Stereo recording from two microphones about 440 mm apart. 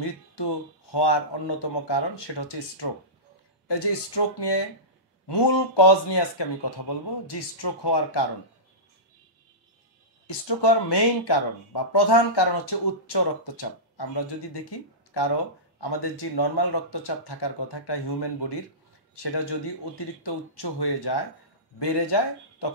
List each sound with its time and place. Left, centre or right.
0.0 s speech: left
10.2 s speech: left